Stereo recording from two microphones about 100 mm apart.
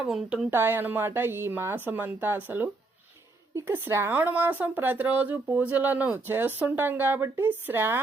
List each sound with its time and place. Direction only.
0.0 s speech: 5° right (ahead or behind)
0.5 s speech: 20° right (ahead or behind)